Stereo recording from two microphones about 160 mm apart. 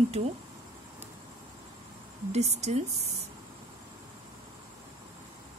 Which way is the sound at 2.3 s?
45° right (ahead or behind).